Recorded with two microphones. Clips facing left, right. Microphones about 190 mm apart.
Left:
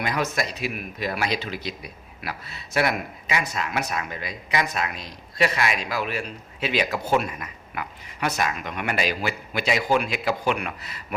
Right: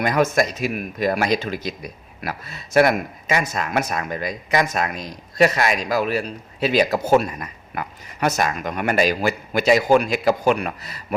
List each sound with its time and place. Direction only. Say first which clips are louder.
0.0 s speech: right 7 dB; 45° right (ahead or behind)